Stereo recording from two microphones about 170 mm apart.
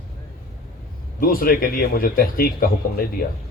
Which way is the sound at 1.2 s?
55° left (ahead or behind).